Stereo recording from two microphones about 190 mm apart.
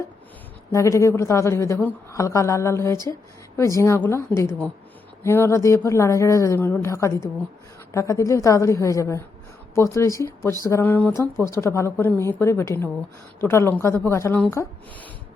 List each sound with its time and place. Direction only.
0.7 s a woman's voice: 15° left (ahead or behind)